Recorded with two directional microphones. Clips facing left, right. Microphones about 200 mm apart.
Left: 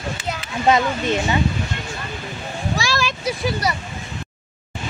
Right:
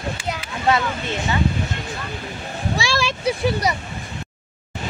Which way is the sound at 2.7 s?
30° right (ahead or behind).